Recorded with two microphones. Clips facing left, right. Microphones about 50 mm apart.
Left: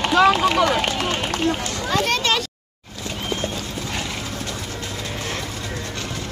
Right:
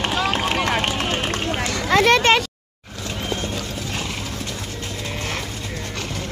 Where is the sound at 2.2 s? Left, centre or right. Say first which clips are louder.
Right 5 dB; right.